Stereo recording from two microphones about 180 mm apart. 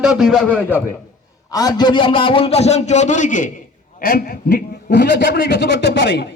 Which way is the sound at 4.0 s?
55° left (ahead or behind).